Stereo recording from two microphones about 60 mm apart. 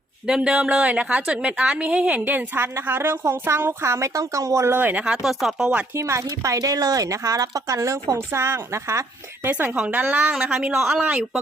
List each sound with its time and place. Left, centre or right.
0.3 s a woman's voice: centre; by 3.8 s right
3.8 s speech: right
4.7 s speech: right
5.0 s speech: centre
5.9 s a woman's voice: right
9.4 s a woman's voice: right
10.3 s speech: centre